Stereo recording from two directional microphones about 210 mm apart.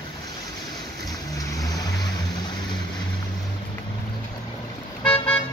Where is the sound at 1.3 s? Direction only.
15° left (ahead or behind).